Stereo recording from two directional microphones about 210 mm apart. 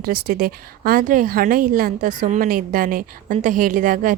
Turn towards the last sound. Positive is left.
turn(degrees=-40)  # may be behind; listen again after turning